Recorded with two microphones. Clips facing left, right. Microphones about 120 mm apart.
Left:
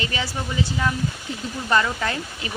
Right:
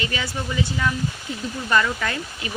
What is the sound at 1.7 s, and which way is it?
Speech, 25° left (ahead or behind).